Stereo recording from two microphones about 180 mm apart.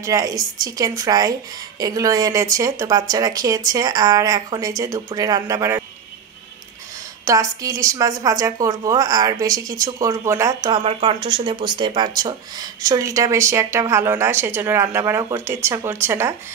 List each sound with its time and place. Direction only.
0.0 s speech: 20° right (ahead or behind)
7.2 s speech: 20° right (ahead or behind)
10.8 s speech: 30° right (ahead or behind); by 16.3 s 15° right (ahead or behind)